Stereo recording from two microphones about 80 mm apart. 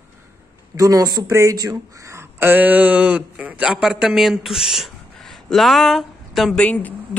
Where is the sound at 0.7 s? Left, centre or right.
Right; by 6.5 s centre.